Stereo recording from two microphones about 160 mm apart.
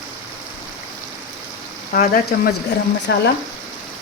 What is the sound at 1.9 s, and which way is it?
Speech, 60° left (ahead or behind).